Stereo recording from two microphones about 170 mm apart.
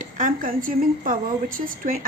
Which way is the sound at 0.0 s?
50° right (ahead or behind).